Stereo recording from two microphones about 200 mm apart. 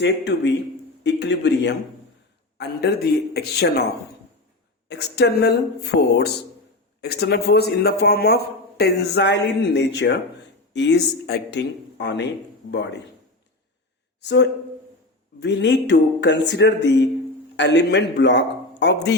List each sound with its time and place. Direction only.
0.0 s speech: 60° left (ahead or behind)
4.9 s speech: 55° left (ahead or behind)
14.2 s speech: 60° left (ahead or behind)